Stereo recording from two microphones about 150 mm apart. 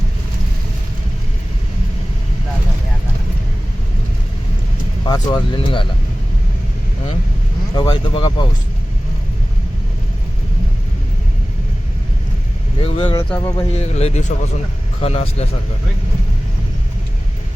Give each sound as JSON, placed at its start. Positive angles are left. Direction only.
{"t": 5.0, "sound": "speech", "side_deg": 30}
{"t": 7.8, "sound": "speech", "side_deg": 30}
{"t": 12.8, "sound": "speech", "side_deg": 35}
{"t": 13.1, "sound": "speech", "side_deg": 20}
{"t": 13.7, "sound": "speech", "side_deg": 45}